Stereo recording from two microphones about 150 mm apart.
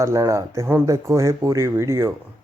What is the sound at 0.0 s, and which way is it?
Speech, 20° right (ahead or behind).